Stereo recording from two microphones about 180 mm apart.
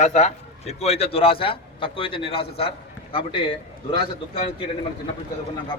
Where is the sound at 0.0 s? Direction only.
40° left (ahead or behind).